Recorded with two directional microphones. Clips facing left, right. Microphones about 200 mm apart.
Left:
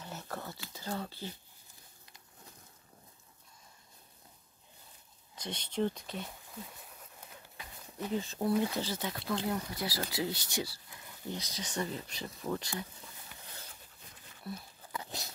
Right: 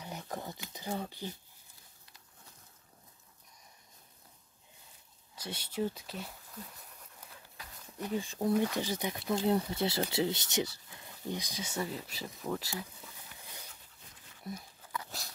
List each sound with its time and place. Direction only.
0.0 s a sound: 15° right (ahead or behind)
5.3 s speech: 10° right (ahead or behind)
7.2 s a sound: 5° left (ahead or behind)
8.1 s speech: 15° right (ahead or behind)
14.5 s speech: 20° right (ahead or behind)
14.9 s dog: 25° left (ahead or behind)